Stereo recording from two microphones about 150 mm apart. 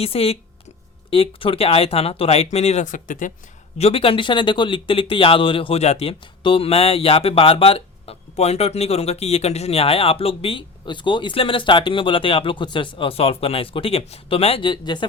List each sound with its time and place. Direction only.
0.0 s speech: 40° left (ahead or behind); by 3.3 s 60° left (ahead or behind)
3.8 s speech: 40° left (ahead or behind)